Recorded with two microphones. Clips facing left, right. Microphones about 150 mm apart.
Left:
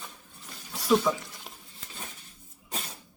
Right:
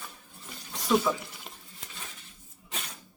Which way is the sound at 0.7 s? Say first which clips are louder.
Left 2 dB; centre (ahead or behind).